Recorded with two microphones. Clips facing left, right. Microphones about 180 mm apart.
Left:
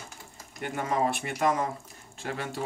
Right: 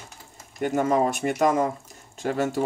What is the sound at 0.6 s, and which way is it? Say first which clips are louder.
Speech: right 7 dB; 45° right (ahead or behind).